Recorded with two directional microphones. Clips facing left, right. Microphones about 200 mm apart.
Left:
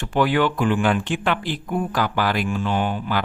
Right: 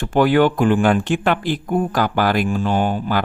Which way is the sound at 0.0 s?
45° right (ahead or behind).